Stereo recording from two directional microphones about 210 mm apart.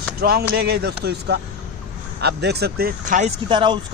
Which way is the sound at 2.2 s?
50° right (ahead or behind).